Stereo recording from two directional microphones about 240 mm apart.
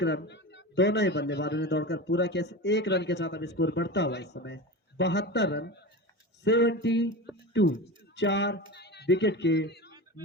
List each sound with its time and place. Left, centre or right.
0.0 s a man's voice: left